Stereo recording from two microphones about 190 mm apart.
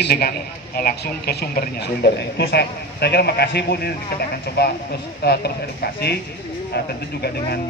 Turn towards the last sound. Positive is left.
turn(degrees=60)  # may be behind; listen again after turning